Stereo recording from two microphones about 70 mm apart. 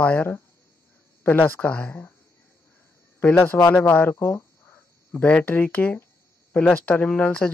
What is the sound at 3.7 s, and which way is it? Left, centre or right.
Speech, left.